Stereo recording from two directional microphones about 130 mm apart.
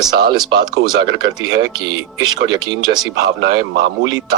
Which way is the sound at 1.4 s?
30° right (ahead or behind).